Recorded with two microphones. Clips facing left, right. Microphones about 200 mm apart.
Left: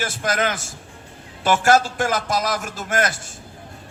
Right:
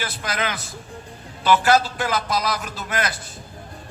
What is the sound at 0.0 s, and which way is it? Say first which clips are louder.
A man's voice: left 4 dB; 45° left (ahead or behind).